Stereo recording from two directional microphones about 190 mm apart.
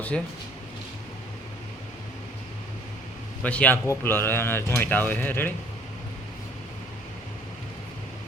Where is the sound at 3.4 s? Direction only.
5° left (ahead or behind).